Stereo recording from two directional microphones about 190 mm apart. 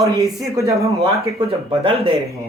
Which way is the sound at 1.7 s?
30° right (ahead or behind).